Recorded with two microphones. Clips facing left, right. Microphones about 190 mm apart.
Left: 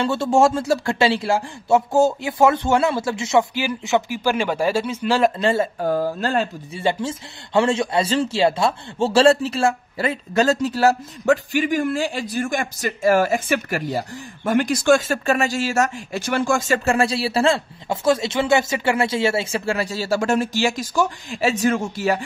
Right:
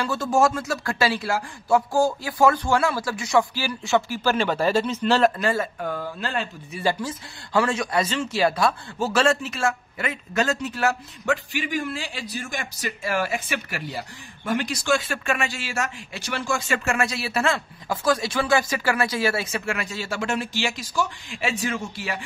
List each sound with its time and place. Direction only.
0.0 s speech: 25° left (ahead or behind); by 5.3 s 10° left (ahead or behind)
5.4 s speech: 25° left (ahead or behind)
6.7 s speech: 25° left (ahead or behind)
11.5 s a man's voice: 45° left (ahead or behind)